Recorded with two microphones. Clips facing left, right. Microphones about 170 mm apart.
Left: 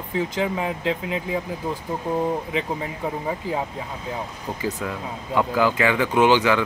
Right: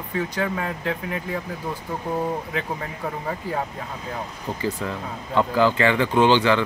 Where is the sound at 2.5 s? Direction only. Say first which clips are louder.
Left 2 dB; 10° left (ahead or behind).